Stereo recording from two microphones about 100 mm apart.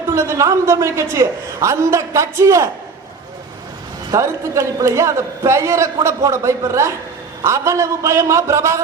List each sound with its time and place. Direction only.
0.1 s a man's voice: 30° right (ahead or behind)
4.1 s a man's voice: 30° right (ahead or behind)